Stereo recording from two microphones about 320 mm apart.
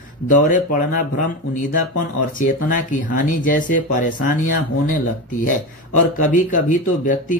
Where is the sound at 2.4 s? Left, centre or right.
Left.